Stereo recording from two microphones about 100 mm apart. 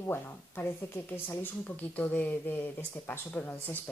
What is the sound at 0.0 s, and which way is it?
Speech, 25° left (ahead or behind).